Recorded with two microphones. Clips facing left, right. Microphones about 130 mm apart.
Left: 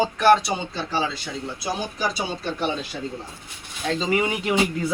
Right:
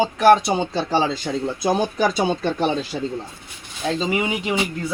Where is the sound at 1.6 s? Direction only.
50° right (ahead or behind).